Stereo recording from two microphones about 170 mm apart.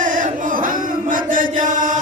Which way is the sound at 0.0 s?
50° right (ahead or behind).